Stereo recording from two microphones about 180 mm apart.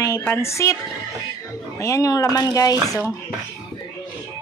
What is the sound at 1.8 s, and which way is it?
Speech, 20° left (ahead or behind).